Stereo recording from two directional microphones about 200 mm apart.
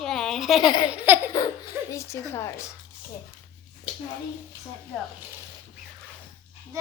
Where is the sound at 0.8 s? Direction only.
10° right (ahead or behind).